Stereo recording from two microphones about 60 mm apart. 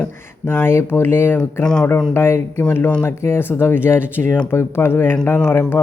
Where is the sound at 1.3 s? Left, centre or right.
Centre.